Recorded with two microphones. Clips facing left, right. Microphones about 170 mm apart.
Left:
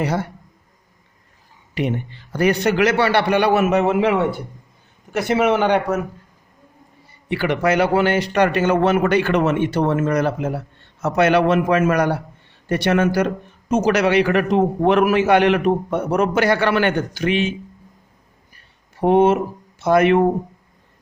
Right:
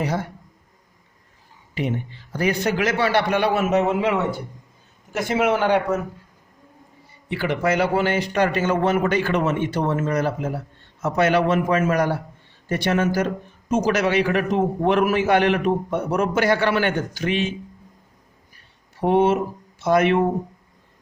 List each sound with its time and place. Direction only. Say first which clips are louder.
0.0 s speech: left 3 dB; 70° left (ahead or behind)
1.7 s speech: left 3 dB; 70° left (ahead or behind)
7.3 s a man's voice: left 3 dB; 70° left (ahead or behind)
18.9 s a man's voice: left 3 dB; 50° left (ahead or behind)